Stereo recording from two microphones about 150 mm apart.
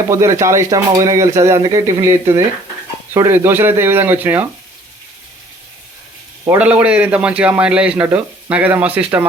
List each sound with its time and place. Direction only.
0.1 s a man's voice: 20° right (ahead or behind)
6.6 s a man's voice: 10° right (ahead or behind)